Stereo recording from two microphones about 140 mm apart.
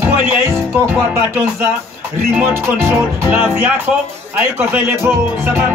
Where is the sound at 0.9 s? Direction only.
15° right (ahead or behind).